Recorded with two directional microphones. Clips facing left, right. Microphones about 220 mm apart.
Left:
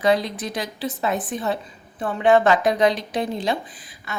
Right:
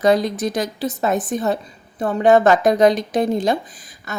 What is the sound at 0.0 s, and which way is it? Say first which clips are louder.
Speech: right 4 dB; 45° right (ahead or behind).